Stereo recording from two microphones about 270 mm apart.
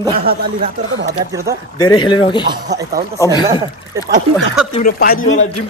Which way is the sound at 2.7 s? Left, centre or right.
Right.